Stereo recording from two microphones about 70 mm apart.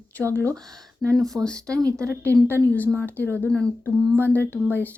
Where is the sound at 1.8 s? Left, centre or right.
Right.